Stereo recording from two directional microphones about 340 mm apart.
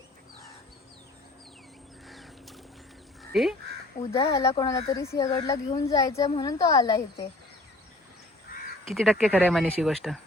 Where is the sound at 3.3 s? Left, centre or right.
Centre.